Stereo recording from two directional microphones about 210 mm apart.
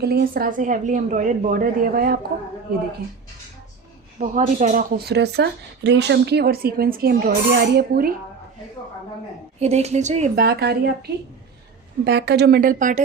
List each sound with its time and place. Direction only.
0.0 s a woman's voice: 50° right (ahead or behind)
4.2 s speech: 35° right (ahead or behind)
9.6 s a woman's voice: 30° right (ahead or behind)